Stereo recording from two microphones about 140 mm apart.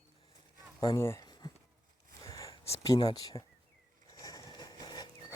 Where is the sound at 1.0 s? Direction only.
20° left (ahead or behind).